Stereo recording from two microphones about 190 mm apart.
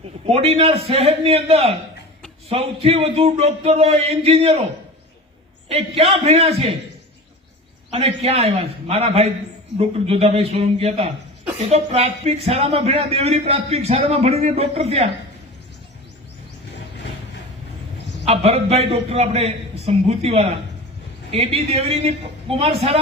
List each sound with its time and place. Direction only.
0.3 s speech: 30° right (ahead or behind)
5.6 s speech: 30° right (ahead or behind)
7.9 s speech: 35° right (ahead or behind)
18.3 s speech: 35° right (ahead or behind)